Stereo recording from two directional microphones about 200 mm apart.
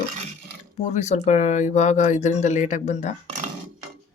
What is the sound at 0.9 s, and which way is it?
Speech, 35° left (ahead or behind).